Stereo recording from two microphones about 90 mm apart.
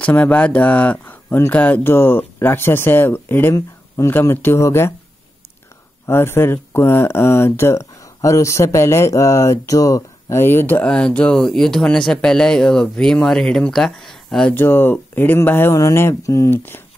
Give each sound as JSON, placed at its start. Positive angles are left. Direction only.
{"t": 0.0, "sound": "speech", "side_deg": 15}
{"t": 6.0, "sound": "speech", "side_deg": 25}
{"t": 10.8, "sound": "speech", "side_deg": 10}
{"t": 14.5, "sound": "speech", "side_deg": 25}